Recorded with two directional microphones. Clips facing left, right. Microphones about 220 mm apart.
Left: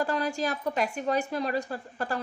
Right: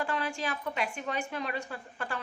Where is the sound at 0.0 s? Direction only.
40° left (ahead or behind).